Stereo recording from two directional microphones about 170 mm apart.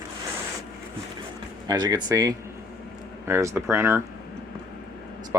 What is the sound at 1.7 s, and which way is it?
Speech, 25° right (ahead or behind).